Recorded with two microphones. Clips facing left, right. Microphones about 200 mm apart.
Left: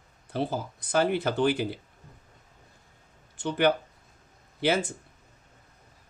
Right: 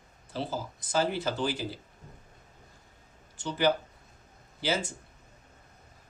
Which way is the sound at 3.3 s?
60° left (ahead or behind).